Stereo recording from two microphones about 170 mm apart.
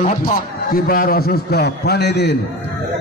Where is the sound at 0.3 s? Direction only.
60° left (ahead or behind); by 2.3 s 80° left.